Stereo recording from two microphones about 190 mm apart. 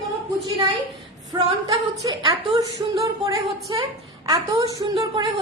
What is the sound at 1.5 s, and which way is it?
A woman's voice, 30° right (ahead or behind).